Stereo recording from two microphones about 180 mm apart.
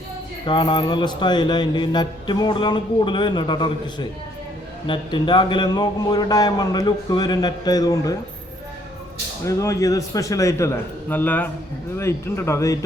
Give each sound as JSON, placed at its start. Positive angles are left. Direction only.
{"t": 0.4, "sound": "speech", "side_deg": 25}
{"t": 9.4, "sound": "a man's voice", "side_deg": 15}